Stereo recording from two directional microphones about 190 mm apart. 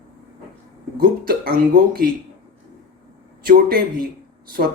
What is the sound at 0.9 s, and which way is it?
Speech, 50° right (ahead or behind).